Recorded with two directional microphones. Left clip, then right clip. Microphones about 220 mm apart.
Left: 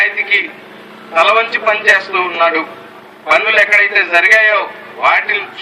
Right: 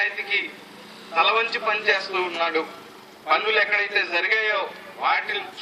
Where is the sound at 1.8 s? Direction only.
25° left (ahead or behind).